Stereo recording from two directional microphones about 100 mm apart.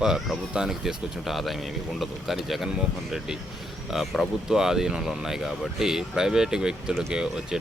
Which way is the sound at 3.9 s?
Centre (ahead or behind).